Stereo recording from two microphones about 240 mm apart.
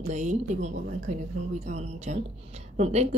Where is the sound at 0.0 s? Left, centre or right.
Right.